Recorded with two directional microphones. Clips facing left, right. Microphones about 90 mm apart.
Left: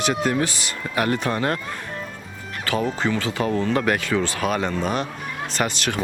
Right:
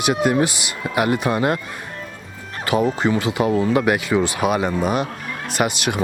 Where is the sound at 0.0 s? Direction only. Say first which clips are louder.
Right 4 dB; 15° right (ahead or behind).